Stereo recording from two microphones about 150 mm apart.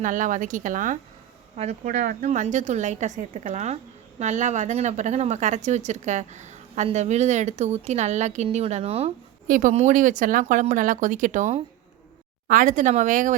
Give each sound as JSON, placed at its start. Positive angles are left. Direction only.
{"t": 0.0, "sound": "speech", "side_deg": -60}
{"t": 1.5, "sound": "speech", "side_deg": -45}
{"t": 1.9, "sound": "a woman's voice", "side_deg": -55}
{"t": 9.5, "sound": "speech", "side_deg": -60}
{"t": 12.5, "sound": "speech", "side_deg": -65}